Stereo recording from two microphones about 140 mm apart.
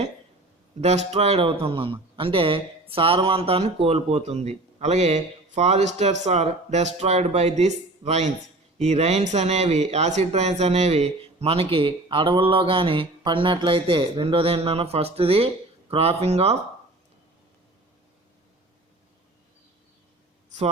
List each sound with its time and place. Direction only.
0.8 s a man's voice: 50° right (ahead or behind)